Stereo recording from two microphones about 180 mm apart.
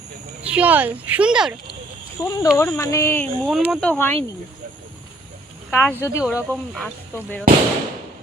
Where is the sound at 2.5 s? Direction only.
15° left (ahead or behind); by 3.9 s centre (ahead or behind).